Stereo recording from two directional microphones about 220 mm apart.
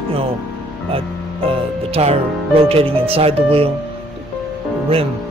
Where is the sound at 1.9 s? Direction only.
25° right (ahead or behind).